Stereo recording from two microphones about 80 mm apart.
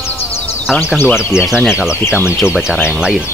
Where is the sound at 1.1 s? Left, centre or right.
Centre.